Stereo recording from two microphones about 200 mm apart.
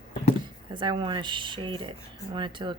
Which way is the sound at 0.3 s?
25° right (ahead or behind).